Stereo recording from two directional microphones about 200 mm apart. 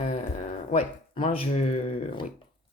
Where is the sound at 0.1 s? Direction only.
35° left (ahead or behind).